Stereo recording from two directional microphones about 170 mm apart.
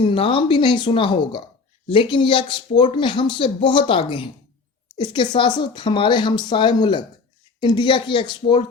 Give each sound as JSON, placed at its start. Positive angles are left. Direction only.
{"t": 0.0, "sound": "a woman's voice", "side_deg": 30}